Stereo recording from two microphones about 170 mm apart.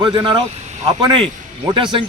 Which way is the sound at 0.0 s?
30° right (ahead or behind).